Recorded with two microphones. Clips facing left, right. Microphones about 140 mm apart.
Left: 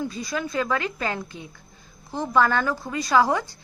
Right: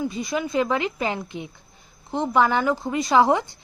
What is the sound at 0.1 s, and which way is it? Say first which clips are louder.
A woman's voice: right 3 dB; 20° right (ahead or behind).